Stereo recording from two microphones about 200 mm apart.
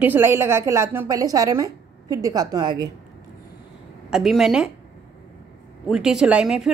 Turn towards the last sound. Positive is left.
turn(degrees=-5)  # may be behind; listen again after turning